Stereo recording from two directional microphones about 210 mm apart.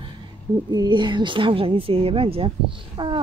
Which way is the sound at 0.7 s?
20° right (ahead or behind).